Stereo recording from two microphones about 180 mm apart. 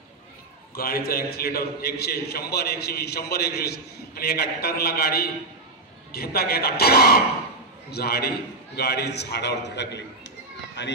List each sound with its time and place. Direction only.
0.7 s a man's voice: 55° left (ahead or behind)